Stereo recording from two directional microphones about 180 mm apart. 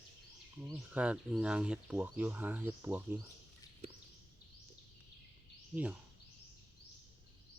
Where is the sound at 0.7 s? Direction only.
5° right (ahead or behind).